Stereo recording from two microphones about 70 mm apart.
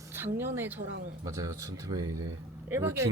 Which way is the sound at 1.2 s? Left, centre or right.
Right.